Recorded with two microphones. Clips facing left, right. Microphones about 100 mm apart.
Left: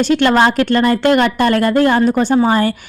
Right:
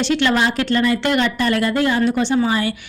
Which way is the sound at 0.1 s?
50° left (ahead or behind).